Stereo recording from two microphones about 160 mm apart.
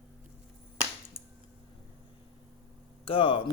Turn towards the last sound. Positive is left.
turn(degrees=35)  # may be behind; listen again after turning